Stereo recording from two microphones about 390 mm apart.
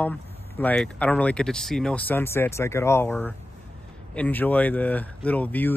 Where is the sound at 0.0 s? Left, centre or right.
Centre.